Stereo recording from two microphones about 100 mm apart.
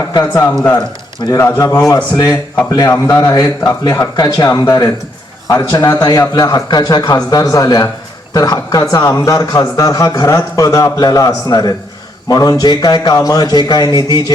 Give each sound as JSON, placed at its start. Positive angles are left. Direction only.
{"t": 0.1, "sound": "a man's voice", "side_deg": 35}